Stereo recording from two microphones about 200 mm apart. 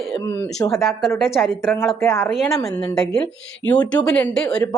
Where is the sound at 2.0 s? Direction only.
10° left (ahead or behind).